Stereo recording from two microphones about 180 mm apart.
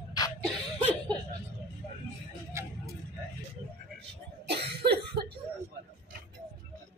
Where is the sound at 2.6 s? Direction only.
15° right (ahead or behind).